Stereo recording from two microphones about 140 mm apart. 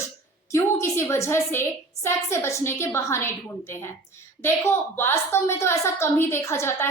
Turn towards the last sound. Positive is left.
turn(degrees=20)  # may be behind; listen again after turning